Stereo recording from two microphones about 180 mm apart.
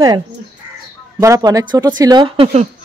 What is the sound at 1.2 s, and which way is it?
Speech, 20° right (ahead or behind).